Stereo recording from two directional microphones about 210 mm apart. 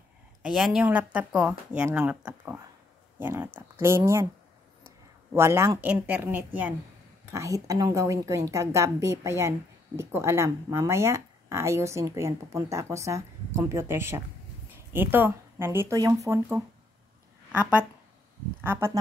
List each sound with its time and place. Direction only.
0.4 s speech: centre (ahead or behind)
5.3 s speech: 10° right (ahead or behind)